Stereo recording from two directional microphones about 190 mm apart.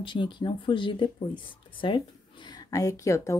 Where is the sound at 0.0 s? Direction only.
25° left (ahead or behind).